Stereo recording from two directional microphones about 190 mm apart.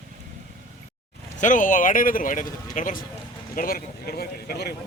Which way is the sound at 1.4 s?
45° left (ahead or behind).